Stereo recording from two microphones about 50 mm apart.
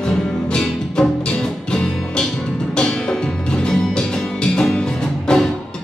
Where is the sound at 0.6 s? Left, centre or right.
Centre.